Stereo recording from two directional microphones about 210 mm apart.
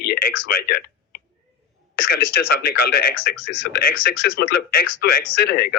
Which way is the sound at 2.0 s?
45° left (ahead or behind).